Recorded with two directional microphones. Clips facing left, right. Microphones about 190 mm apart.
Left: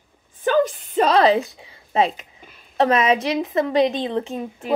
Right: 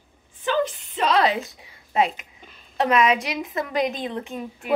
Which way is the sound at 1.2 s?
30° left (ahead or behind).